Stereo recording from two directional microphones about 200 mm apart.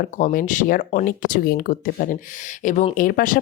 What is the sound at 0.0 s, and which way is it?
Speech, 40° left (ahead or behind).